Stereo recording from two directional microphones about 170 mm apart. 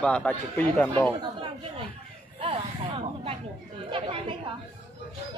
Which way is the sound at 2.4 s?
30° right (ahead or behind).